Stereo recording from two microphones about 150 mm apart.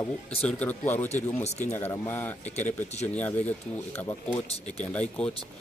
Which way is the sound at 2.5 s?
45° left (ahead or behind).